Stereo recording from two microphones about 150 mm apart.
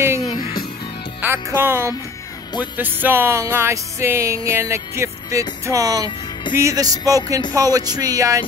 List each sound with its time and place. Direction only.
0.2 s music: 30° left (ahead or behind)
1.2 s speech: 15° right (ahead or behind)
2.8 s music: 15° right (ahead or behind)